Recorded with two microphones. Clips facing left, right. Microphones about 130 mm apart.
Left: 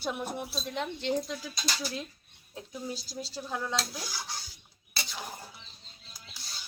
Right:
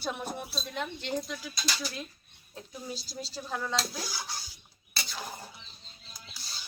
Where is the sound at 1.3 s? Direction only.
35° left (ahead or behind).